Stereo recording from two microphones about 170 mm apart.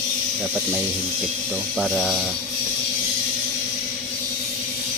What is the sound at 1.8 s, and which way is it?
Speech, centre (ahead or behind).